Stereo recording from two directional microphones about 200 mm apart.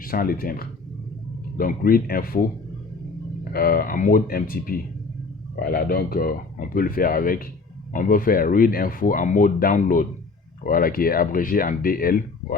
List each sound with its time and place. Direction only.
0.0 s speech: 45° left (ahead or behind)
3.5 s speech: 50° left (ahead or behind)